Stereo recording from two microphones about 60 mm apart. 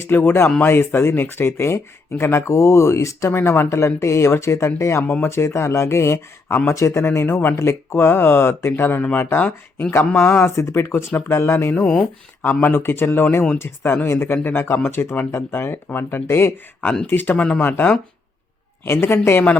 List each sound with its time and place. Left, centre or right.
0.1 s speech: left
10.2 s speech: left
10.8 s speech: left
17.1 s speech: left
17.6 s speech: left
18.9 s speech: left